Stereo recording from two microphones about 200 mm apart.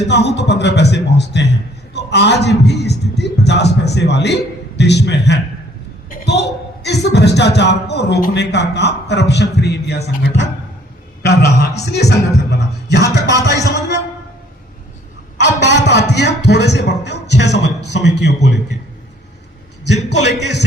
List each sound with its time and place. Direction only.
0.1 s a man's voice: 60° left (ahead or behind)
6.1 s a sound: 55° left (ahead or behind)
6.8 s a man's voice: 55° left (ahead or behind)
11.2 s a man's voice: 55° left (ahead or behind)
13.4 s music: 60° left (ahead or behind)
15.4 s a man's voice: 60° left (ahead or behind)
20.1 s a man's voice: 60° left (ahead or behind)